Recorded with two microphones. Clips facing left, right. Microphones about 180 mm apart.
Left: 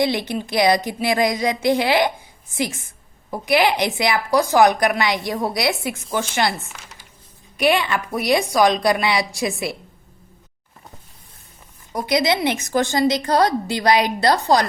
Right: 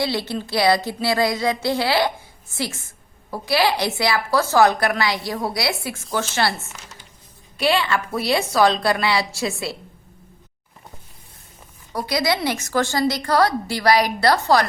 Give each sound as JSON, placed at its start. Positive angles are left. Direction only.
{"t": 0.0, "sound": "a woman's voice", "side_deg": 20}
{"t": 11.9, "sound": "a woman's voice", "side_deg": 20}